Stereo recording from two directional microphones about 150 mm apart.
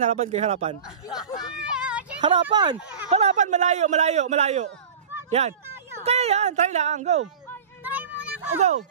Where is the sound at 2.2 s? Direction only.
30° right (ahead or behind).